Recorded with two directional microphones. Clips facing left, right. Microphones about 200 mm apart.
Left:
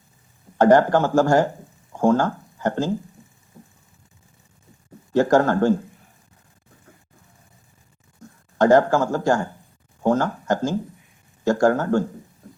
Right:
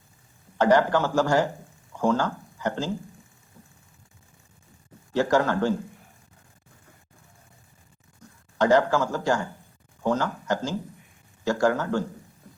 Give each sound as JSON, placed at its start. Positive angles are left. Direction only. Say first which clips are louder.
{"t": 0.6, "sound": "speech", "louder": "left 5 dB", "side_deg": 50}
{"t": 5.1, "sound": "speech", "louder": "left 5 dB", "side_deg": 50}
{"t": 8.5, "sound": "speech", "louder": "left 5 dB", "side_deg": 50}